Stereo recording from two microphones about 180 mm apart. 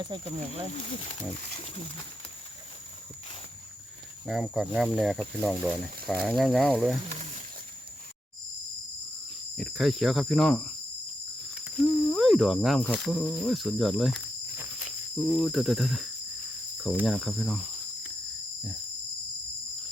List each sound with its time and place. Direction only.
0.0 s speech: 25° right (ahead or behind)
1.5 s speech: 35° left (ahead or behind)
4.3 s speech: centre (ahead or behind)
9.6 s speech: centre (ahead or behind)